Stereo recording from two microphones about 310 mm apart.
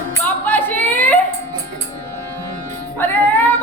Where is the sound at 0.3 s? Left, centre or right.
Centre.